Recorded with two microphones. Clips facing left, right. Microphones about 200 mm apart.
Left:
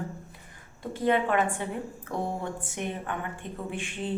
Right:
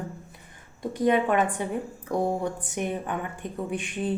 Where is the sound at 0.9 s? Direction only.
15° right (ahead or behind).